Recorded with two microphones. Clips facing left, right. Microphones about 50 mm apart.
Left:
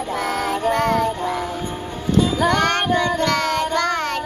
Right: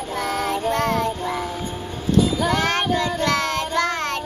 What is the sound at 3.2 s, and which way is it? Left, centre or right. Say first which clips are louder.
Child singing: left 2 dB; centre.